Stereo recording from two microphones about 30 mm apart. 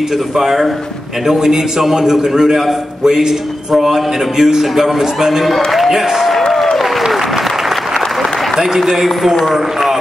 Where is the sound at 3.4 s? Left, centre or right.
Centre.